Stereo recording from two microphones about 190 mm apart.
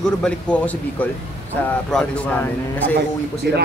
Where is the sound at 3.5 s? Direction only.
60° right (ahead or behind).